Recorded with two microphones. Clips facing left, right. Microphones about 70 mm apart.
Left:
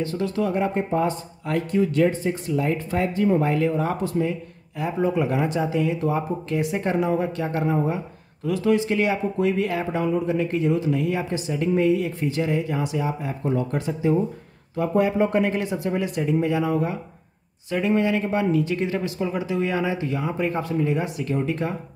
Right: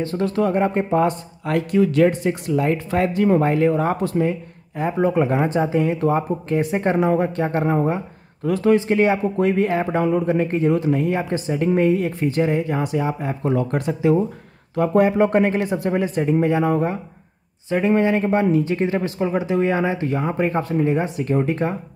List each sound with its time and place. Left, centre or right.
0.0 s speech: right
9.9 s speech: right
13.4 s speech: right
13.7 s speech: right